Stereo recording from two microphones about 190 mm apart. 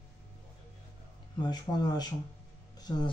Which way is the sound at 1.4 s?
20° left (ahead or behind).